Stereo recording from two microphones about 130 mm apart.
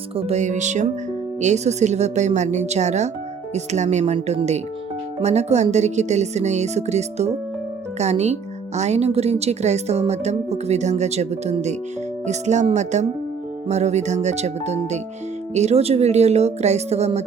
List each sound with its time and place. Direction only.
0.2 s speech: 60° right (ahead or behind)